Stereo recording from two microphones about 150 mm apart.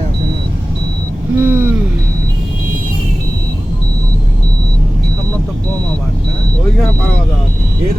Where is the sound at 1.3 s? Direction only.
10° right (ahead or behind).